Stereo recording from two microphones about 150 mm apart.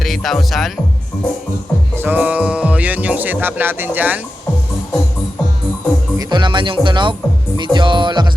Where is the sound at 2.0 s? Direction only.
10° right (ahead or behind).